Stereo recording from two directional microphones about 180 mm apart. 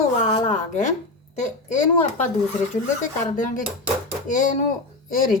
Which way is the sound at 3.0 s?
45° left (ahead or behind).